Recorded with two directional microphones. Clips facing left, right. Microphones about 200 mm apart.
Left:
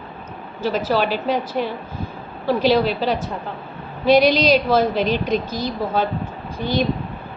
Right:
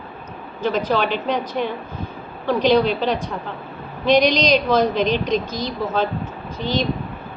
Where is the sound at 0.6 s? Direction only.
5° left (ahead or behind).